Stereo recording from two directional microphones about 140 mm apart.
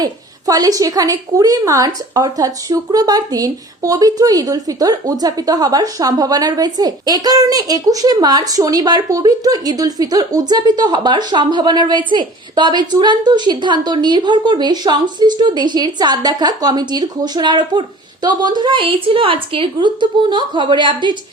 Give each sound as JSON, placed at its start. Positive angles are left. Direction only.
{"t": 0.0, "sound": "a woman's voice", "side_deg": -25}